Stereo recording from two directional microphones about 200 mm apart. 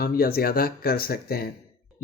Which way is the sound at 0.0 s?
50° left (ahead or behind).